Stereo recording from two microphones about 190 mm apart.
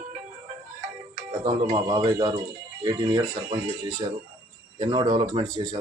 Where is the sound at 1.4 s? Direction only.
30° right (ahead or behind).